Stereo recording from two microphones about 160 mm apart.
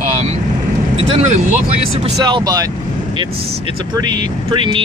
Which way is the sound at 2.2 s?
25° right (ahead or behind).